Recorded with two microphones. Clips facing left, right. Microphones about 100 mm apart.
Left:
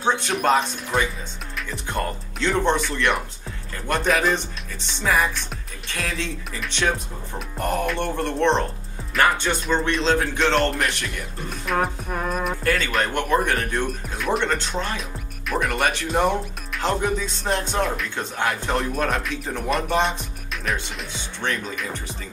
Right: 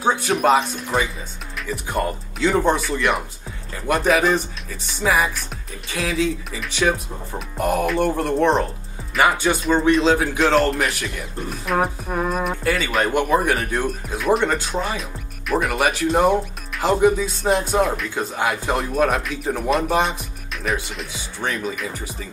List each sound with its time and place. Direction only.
0.0 s speech: 5° right (ahead or behind)